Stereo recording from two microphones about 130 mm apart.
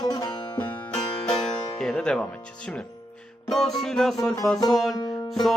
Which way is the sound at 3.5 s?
Centre (ahead or behind).